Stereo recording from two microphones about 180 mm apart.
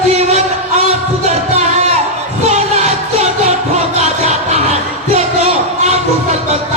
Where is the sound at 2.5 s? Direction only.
40° right (ahead or behind).